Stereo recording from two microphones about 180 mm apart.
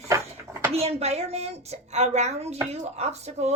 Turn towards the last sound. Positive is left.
turn(degrees=-35)  # may be behind; listen again after turning